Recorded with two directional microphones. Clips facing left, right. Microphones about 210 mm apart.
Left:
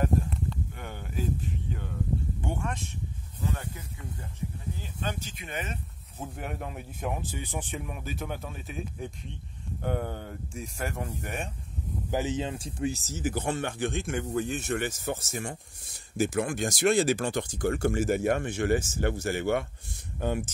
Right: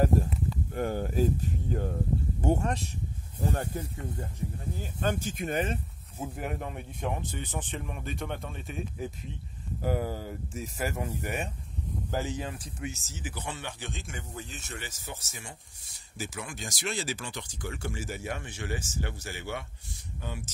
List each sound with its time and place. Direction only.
0.0 s a sound: 40° right (ahead or behind)
0.7 s speech: 40° right (ahead or behind)
6.1 s speech: 5° right (ahead or behind)
12.1 s speech: 20° left (ahead or behind); by 20.5 s 55° left (ahead or behind)